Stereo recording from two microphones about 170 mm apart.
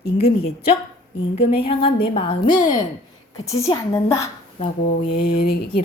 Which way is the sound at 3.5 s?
20° left (ahead or behind).